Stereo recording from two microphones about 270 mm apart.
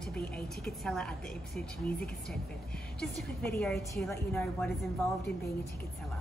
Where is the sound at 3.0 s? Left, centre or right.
Centre.